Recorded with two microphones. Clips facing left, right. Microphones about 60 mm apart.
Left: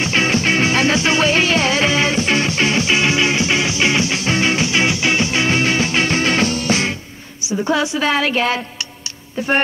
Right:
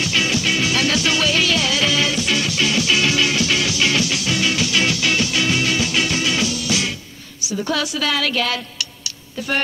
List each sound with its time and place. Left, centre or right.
0.0 s music: left
7.4 s a woman's voice: left